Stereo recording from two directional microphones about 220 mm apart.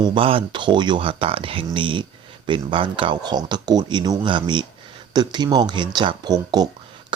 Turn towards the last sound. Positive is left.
turn(degrees=-20)  # may be behind; listen again after turning